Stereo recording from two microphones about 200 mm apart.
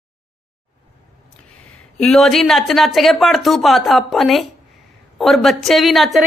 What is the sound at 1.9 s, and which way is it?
A woman's voice, centre (ahead or behind).